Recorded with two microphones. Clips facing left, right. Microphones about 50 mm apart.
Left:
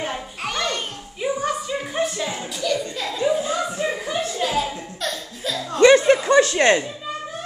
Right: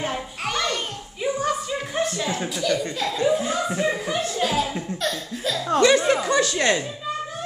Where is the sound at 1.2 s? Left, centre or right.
Centre.